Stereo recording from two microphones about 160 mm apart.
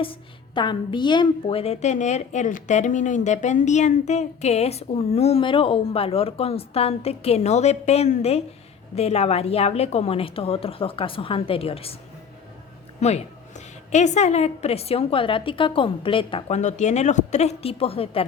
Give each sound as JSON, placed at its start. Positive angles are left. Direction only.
{"t": 0.0, "sound": "a woman's voice", "side_deg": 30}
{"t": 13.0, "sound": "a woman's voice", "side_deg": 45}
{"t": 16.6, "sound": "speech", "side_deg": 45}